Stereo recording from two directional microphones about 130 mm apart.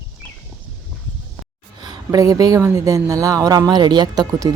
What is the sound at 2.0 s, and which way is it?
Speech, 25° right (ahead or behind).